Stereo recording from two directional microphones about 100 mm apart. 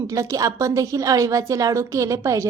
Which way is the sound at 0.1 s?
35° right (ahead or behind).